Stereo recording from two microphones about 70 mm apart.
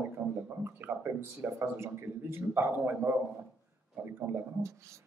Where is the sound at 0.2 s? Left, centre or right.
Right.